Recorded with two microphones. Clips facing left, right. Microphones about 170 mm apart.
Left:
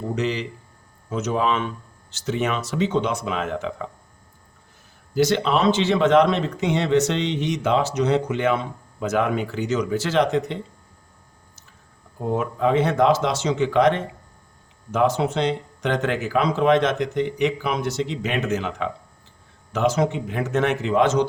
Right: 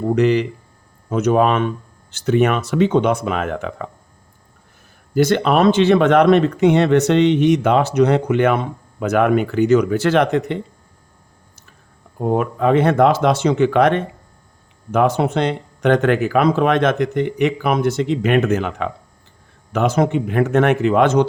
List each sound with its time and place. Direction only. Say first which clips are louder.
0.1 s speech: right 10 dB; 60° right (ahead or behind)
5.1 s speech: right 5 dB; 55° right (ahead or behind)
12.2 s speech: right 4 dB; 60° right (ahead or behind)